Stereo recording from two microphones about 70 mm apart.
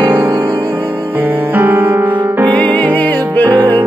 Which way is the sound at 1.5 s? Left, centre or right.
Right.